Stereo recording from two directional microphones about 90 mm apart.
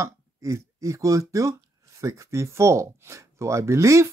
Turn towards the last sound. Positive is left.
turn(degrees=-35)  # may be behind; listen again after turning